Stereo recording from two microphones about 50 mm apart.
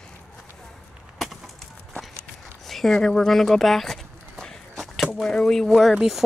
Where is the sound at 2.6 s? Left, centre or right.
Centre.